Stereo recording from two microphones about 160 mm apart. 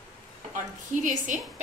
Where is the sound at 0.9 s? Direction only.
50° right (ahead or behind).